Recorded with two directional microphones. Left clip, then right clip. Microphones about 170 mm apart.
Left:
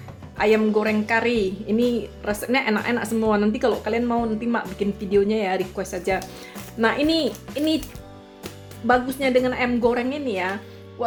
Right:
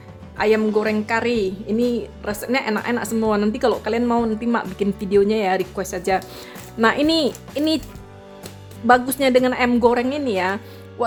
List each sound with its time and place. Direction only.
0.3 s a woman's voice: 35° right (ahead or behind)
8.9 s a woman's voice: 50° right (ahead or behind)